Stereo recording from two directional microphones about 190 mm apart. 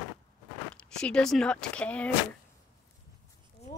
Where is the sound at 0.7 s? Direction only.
5° left (ahead or behind).